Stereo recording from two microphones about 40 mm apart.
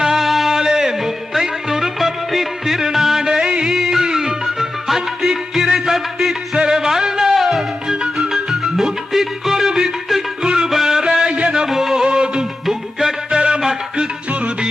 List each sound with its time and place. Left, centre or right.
0.0 s music: centre
7.9 s music: centre
10.7 s music: centre
11.3 s music: right
11.5 s music: centre
12.0 s music: right
12.6 s music: centre
13.3 s music: right
14.3 s music: right